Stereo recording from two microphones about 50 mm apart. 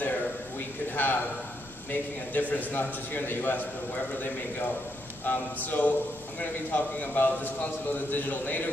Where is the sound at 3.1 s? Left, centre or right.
Left.